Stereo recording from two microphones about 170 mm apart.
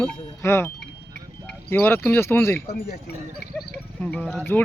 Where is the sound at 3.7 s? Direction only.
5° left (ahead or behind).